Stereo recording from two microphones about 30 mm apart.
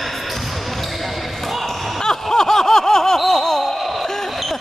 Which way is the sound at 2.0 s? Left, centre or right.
Centre.